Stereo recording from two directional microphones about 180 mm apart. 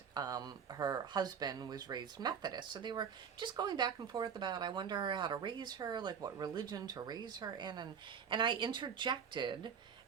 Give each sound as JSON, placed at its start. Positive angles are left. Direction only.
{"t": 0.1, "sound": "speech", "side_deg": -20}